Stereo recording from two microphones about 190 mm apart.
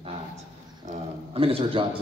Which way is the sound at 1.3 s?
30° right (ahead or behind).